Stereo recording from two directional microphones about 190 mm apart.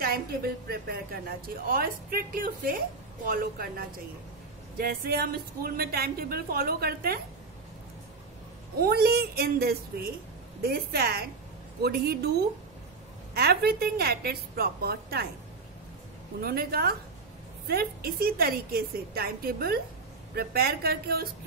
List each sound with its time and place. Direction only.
0.7 s a woman's voice: 55° right (ahead or behind)
8.8 s a woman's voice: 55° right (ahead or behind)
16.3 s a woman's voice: 50° right (ahead or behind)